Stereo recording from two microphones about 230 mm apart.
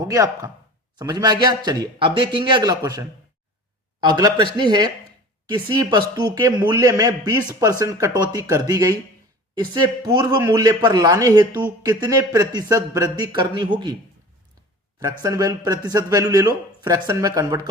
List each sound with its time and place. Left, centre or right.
0.0 s speech: centre
15.2 s speech: centre